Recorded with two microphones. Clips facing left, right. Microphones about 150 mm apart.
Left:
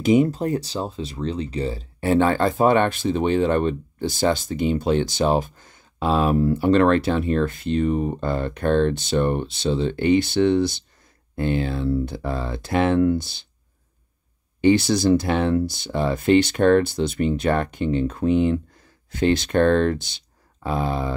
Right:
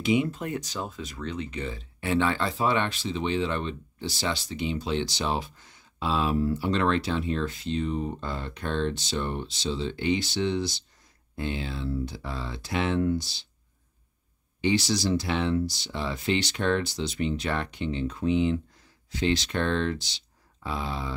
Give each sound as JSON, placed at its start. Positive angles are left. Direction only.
{"t": 0.0, "sound": "speech", "side_deg": 40}
{"t": 14.6, "sound": "speech", "side_deg": 55}